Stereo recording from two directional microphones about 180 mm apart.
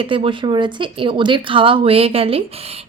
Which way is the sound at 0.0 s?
30° right (ahead or behind).